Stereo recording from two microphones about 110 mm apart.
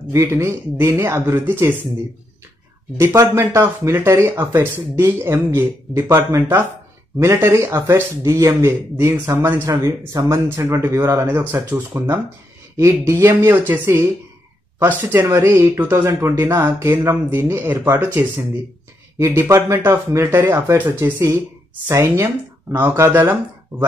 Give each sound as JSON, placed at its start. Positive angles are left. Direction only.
{"t": 0.1, "sound": "speech", "side_deg": -25}
{"t": 3.0, "sound": "speech", "side_deg": -25}